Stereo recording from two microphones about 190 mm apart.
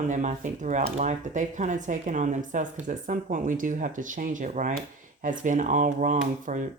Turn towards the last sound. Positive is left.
turn(degrees=-40)  # may be behind; listen again after turning